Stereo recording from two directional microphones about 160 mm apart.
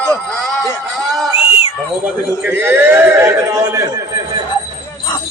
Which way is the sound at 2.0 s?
15° right (ahead or behind).